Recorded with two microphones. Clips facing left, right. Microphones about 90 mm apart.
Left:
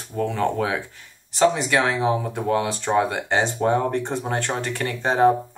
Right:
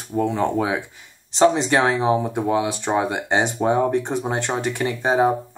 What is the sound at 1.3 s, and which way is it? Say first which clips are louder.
Speech: right 3 dB; 25° right (ahead or behind).